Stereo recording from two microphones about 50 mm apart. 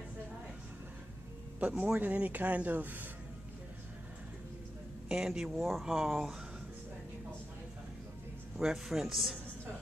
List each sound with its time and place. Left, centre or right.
1.6 s speech: right
5.0 s speech: centre
5.5 s speech: centre
5.9 s a man's voice: centre
8.5 s a man's voice: centre